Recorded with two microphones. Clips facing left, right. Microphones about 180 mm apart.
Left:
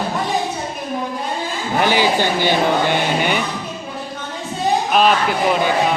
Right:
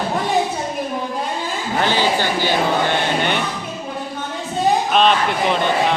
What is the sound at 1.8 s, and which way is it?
Speech, 15° left (ahead or behind).